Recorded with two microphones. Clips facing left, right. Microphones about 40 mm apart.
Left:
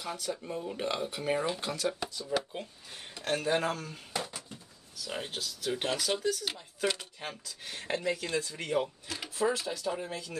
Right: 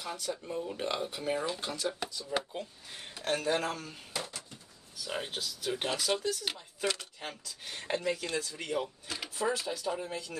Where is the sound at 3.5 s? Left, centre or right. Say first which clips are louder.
Left 4 dB; centre.